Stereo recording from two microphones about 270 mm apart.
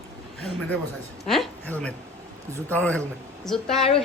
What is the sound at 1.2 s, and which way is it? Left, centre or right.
A woman's voice, centre.